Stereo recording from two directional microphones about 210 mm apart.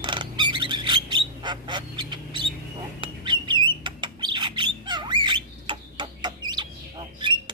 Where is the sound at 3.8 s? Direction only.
20° right (ahead or behind).